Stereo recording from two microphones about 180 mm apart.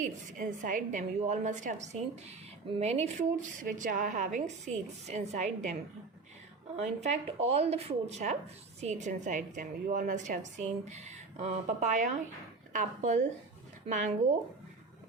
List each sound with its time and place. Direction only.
0.0 s a woman's voice: 45° right (ahead or behind)
6.7 s a woman's voice: 40° right (ahead or behind)